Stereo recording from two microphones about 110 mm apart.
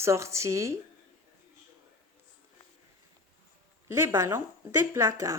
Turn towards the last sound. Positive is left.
turn(degrees=-25)  # may be behind; listen again after turning